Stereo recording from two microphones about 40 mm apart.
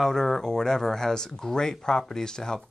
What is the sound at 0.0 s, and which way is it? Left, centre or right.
Speech, centre.